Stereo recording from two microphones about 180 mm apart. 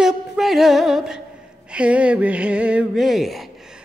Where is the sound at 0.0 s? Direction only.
Centre (ahead or behind).